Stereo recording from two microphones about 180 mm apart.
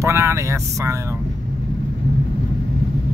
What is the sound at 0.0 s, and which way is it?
Vehicle, 15° right (ahead or behind).